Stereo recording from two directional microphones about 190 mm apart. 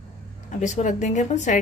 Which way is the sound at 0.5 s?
40° left (ahead or behind).